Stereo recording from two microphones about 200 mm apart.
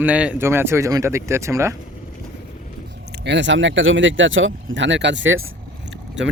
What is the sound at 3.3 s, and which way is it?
Speech, 65° right (ahead or behind).